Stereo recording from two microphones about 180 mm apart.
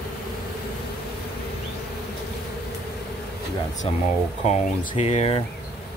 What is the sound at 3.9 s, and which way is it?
Speech, 35° left (ahead or behind).